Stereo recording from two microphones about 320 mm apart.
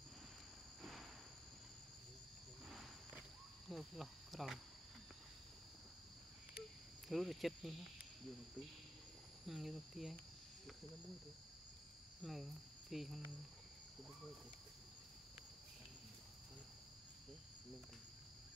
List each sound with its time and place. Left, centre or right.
2.6 s wild animals: centre
7.1 s speech: centre
9.5 s speech: centre
12.2 s speech: centre